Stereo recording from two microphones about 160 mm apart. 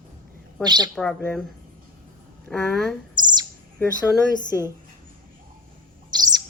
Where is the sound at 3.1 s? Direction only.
25° right (ahead or behind).